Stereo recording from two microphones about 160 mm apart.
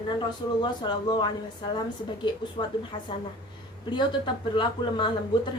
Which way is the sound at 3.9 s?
30° left (ahead or behind).